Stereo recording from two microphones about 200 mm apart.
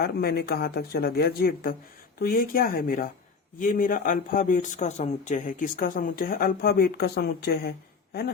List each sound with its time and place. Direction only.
0.0 s speech: 50° left (ahead or behind)